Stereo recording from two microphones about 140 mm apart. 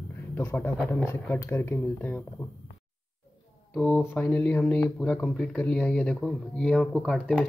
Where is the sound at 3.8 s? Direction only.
10° left (ahead or behind).